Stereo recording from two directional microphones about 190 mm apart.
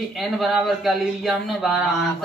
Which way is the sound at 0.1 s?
Centre (ahead or behind).